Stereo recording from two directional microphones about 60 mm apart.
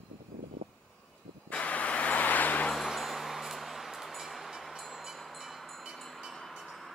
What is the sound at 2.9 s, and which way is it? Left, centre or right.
Vehicle, centre.